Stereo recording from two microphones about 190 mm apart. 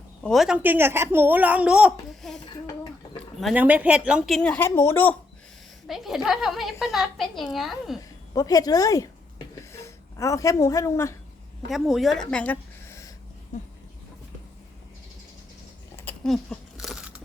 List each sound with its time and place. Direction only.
0.2 s a woman's voice: centre (ahead or behind)
3.4 s a woman's voice: 10° right (ahead or behind); by 5.1 s 10° left (ahead or behind)
5.9 s a woman's voice: centre (ahead or behind)
8.4 s a woman's voice: 20° left (ahead or behind)
11.7 s a woman's voice: centre (ahead or behind)
16.0 s biting: 5° left (ahead or behind)